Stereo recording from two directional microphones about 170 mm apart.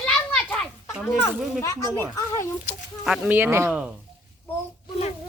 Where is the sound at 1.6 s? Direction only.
15° left (ahead or behind).